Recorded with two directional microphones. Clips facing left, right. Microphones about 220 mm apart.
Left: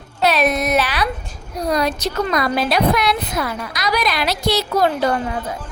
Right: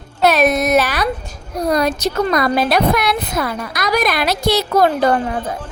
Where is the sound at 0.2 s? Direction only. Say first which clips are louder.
Right 3 dB; 45° right (ahead or behind).